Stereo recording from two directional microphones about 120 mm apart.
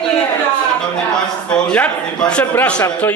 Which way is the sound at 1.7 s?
10° left (ahead or behind).